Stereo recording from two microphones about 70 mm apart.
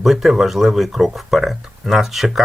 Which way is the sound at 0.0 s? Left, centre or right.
Centre.